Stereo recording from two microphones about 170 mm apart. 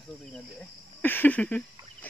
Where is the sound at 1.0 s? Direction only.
10° left (ahead or behind).